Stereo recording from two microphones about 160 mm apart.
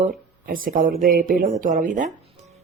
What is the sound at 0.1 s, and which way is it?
A woman's voice, 60° right (ahead or behind).